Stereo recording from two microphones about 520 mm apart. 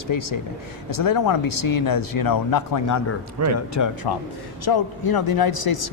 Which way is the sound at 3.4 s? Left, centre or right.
Right.